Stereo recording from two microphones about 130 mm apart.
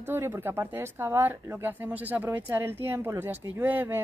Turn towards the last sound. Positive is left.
turn(degrees=-15)  # may be behind; listen again after turning